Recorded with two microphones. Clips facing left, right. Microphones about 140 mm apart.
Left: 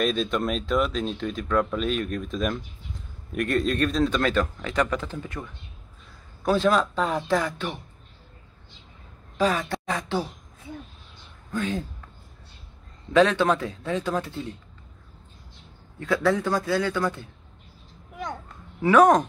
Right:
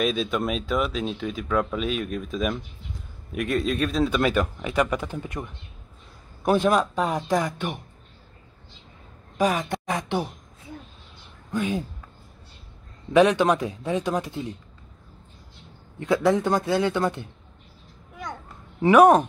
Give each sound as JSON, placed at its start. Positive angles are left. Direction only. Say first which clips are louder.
{"t": 0.0, "sound": "speech", "louder": "even", "side_deg": 0}
{"t": 9.4, "sound": "a man's voice", "louder": "right 1 dB", "side_deg": -15}
{"t": 11.5, "sound": "speech", "louder": "right 2 dB", "side_deg": -10}
{"t": 13.1, "sound": "speech", "louder": "right 2 dB", "side_deg": -15}
{"t": 16.0, "sound": "a man's voice", "louder": "right 2 dB", "side_deg": -20}
{"t": 18.9, "sound": "speech", "louder": "right 2 dB", "side_deg": -10}